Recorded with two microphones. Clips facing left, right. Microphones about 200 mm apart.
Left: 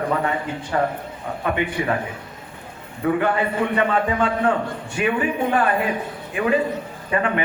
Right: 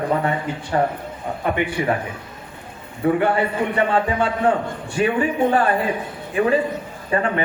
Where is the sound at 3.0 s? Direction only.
30° right (ahead or behind).